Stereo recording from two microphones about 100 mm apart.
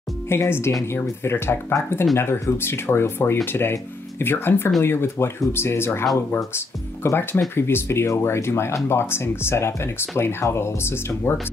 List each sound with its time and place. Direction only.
0.3 s speech: 25° left (ahead or behind)